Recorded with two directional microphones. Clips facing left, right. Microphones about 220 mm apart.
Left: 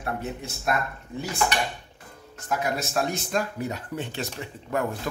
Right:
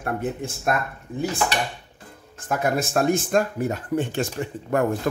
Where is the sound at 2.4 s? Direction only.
50° right (ahead or behind).